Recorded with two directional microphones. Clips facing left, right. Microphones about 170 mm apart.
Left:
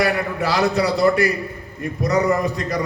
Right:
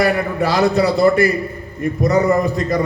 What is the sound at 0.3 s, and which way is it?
A man's voice, 30° right (ahead or behind).